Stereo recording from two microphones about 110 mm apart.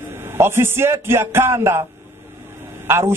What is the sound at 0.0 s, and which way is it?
A man's voice, 20° right (ahead or behind).